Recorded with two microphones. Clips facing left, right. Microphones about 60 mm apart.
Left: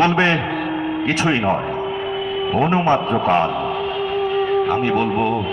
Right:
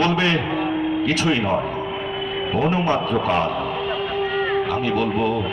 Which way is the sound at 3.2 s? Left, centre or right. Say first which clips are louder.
Left 4 dB; left.